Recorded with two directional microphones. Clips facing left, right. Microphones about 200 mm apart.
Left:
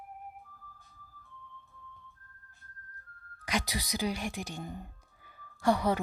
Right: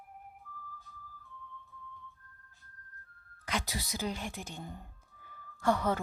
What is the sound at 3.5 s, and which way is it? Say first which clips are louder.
Speech: left 3 dB; 15° left (ahead or behind).